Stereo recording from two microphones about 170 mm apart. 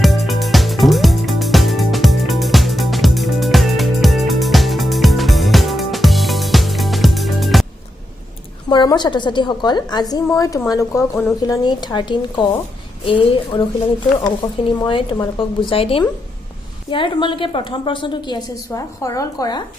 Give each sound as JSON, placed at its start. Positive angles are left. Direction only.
{"t": 0.0, "sound": "music", "side_deg": 0}
{"t": 8.7, "sound": "a woman's voice", "side_deg": 25}